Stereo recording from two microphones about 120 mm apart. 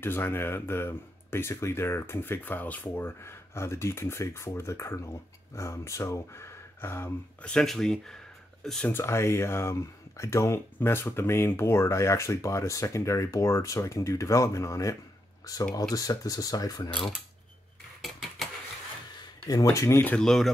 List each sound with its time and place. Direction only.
0.0 s speech: 20° left (ahead or behind)
7.4 s speech: 5° left (ahead or behind)
8.9 s speech: 20° left (ahead or behind)
19.1 s speech: 35° left (ahead or behind)
20.2 s speech: 5° left (ahead or behind)